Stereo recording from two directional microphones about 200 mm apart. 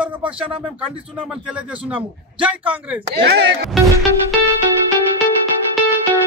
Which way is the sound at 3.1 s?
55° right (ahead or behind).